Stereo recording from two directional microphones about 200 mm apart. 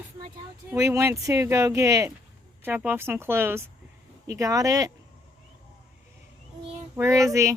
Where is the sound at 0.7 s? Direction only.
15° right (ahead or behind).